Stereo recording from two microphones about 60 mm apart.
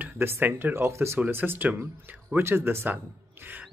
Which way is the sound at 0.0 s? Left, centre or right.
Right.